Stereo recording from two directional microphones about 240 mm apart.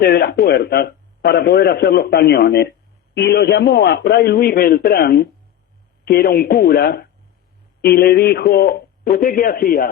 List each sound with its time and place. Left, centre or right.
0.0 s a man's voice: left